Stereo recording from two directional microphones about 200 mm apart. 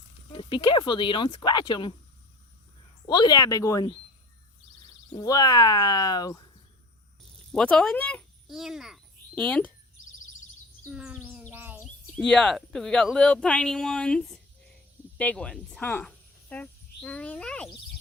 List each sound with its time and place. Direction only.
0.3 s speech: 25° left (ahead or behind)
3.1 s speech: 20° left (ahead or behind)
5.1 s speech: 20° left (ahead or behind)
7.5 s a child's voice: 5° left (ahead or behind)
10.8 s a sound: 5° right (ahead or behind)
12.1 s a woman's voice: 5° left (ahead or behind)